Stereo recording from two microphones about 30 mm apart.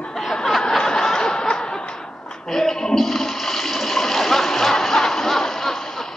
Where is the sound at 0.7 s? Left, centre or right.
Centre.